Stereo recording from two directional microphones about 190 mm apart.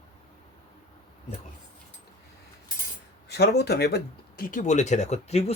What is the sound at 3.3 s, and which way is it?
Speech, 60° left (ahead or behind).